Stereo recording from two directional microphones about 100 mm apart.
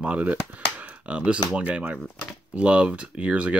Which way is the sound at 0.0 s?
15° right (ahead or behind).